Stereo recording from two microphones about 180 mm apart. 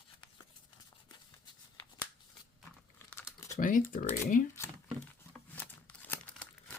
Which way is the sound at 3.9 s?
45° left (ahead or behind).